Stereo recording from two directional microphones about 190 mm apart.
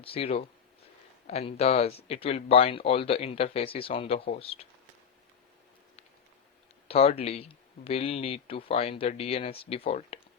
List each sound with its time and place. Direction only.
0.0 s speech: 30° left (ahead or behind)
6.8 s speech: 30° left (ahead or behind)